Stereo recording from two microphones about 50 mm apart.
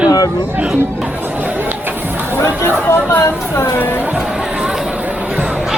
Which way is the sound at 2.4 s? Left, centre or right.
Left.